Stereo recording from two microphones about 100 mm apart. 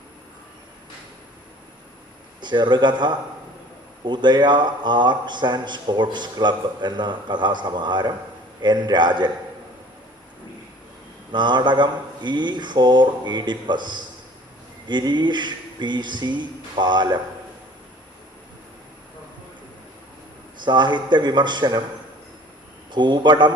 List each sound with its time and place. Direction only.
2.4 s a man's voice: 50° right (ahead or behind)
11.3 s a man's voice: 50° right (ahead or behind)
20.7 s a man's voice: 50° right (ahead or behind)
22.9 s a man's voice: 50° right (ahead or behind)